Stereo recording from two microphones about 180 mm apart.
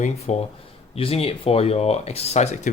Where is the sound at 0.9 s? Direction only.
30° left (ahead or behind).